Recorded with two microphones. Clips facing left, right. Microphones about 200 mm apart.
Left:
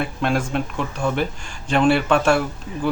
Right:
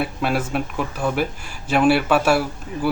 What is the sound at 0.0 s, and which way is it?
Speech, 5° right (ahead or behind).